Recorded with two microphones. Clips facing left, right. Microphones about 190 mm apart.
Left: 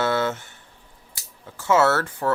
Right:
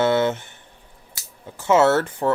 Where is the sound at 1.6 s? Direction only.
20° right (ahead or behind).